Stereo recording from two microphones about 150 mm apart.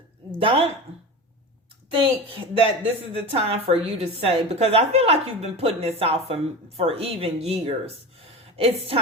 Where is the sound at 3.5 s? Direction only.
40° right (ahead or behind).